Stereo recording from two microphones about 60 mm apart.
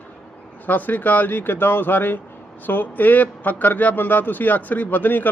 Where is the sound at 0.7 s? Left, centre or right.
Left.